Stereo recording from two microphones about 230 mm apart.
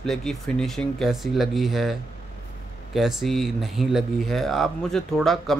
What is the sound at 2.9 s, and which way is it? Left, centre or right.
Speech, centre.